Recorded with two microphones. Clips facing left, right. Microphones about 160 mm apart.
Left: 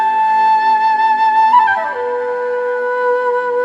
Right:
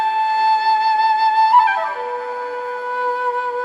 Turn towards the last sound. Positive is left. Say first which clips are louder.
# left 8 dB
turn(degrees=65)  # may be behind; listen again after turning